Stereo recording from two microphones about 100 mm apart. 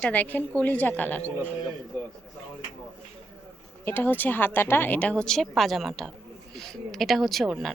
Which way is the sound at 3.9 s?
20° left (ahead or behind).